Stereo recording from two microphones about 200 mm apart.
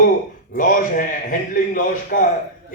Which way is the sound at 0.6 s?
40° left (ahead or behind).